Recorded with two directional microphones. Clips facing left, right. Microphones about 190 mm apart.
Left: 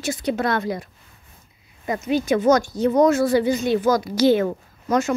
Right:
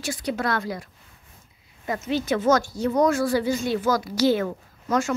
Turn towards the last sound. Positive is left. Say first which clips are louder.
# left 3 dB
turn(degrees=20)  # may be behind; listen again after turning